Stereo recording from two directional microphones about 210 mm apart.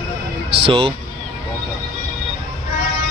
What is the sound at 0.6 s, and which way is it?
Speech, 25° right (ahead or behind).